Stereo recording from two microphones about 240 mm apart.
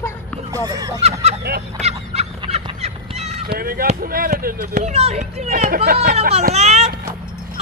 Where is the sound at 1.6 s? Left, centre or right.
Right.